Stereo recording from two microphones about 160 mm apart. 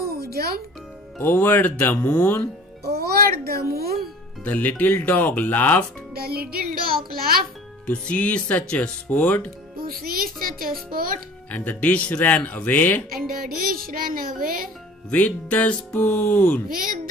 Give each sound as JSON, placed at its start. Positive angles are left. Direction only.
{"t": 0.0, "sound": "music", "side_deg": -75}
{"t": 1.1, "sound": "speech", "side_deg": 10}
{"t": 2.8, "sound": "music", "side_deg": -80}
{"t": 3.7, "sound": "a child's voice", "side_deg": -75}
{"t": 4.5, "sound": "speech", "side_deg": 10}
{"t": 6.1, "sound": "a child's voice", "side_deg": -70}
{"t": 7.8, "sound": "speech", "side_deg": 10}
{"t": 9.8, "sound": "a child's voice", "side_deg": -65}
{"t": 11.5, "sound": "speech", "side_deg": 10}
{"t": 13.1, "sound": "a child's voice", "side_deg": -65}
{"t": 15.0, "sound": "speech", "side_deg": 10}
{"t": 16.6, "sound": "a child's voice", "side_deg": -60}